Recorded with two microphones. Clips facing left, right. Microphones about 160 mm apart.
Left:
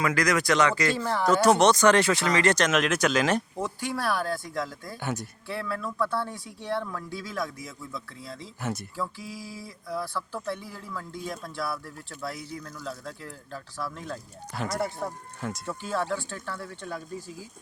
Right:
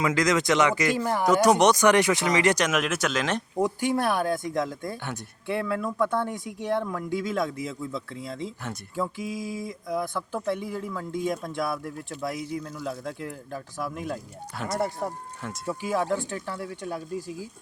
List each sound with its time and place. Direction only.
0.0 s speech: 20° right (ahead or behind); by 3.4 s centre (ahead or behind)
3.6 s speech: 15° right (ahead or behind)
12.8 s speech: 20° right (ahead or behind)
14.5 s speech: centre (ahead or behind)
14.8 s speech: 15° right (ahead or behind)